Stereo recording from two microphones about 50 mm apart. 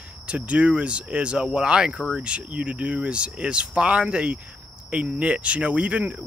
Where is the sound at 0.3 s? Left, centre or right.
Right.